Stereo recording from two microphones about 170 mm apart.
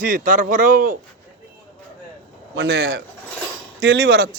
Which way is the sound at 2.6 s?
85° right.